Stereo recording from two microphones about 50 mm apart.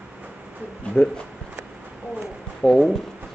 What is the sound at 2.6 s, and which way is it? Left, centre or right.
Speech, centre.